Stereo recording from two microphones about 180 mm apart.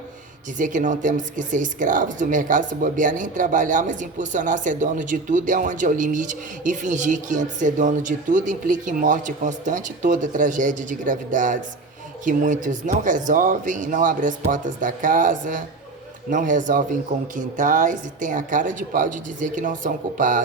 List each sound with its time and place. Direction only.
0.6 s speech: 45° right (ahead or behind)